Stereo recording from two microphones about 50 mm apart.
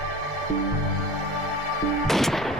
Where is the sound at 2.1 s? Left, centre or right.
Centre.